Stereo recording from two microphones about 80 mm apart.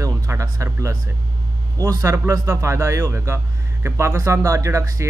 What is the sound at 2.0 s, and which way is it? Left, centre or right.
Speech, right.